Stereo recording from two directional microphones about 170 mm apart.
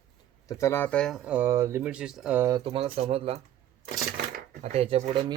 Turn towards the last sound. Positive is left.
turn(degrees=-30)  # may be behind; listen again after turning